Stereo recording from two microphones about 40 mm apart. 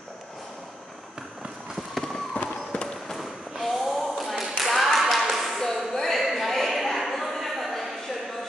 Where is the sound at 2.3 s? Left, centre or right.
Left.